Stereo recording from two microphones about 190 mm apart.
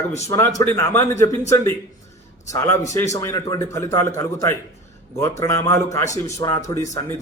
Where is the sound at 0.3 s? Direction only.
15° left (ahead or behind).